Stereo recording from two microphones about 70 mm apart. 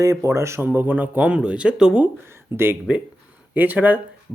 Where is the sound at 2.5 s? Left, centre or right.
Right.